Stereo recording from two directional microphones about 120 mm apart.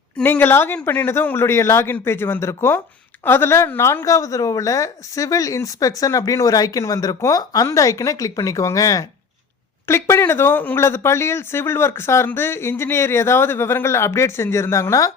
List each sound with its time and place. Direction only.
0.2 s a woman's voice: 15° left (ahead or behind)